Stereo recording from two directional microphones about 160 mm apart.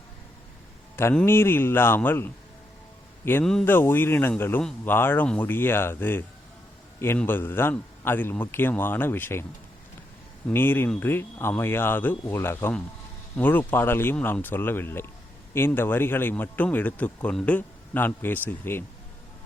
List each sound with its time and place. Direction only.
0.9 s a man's voice: 15° left (ahead or behind)
3.4 s a man's voice: 5° left (ahead or behind)
10.5 s a man's voice: 15° left (ahead or behind)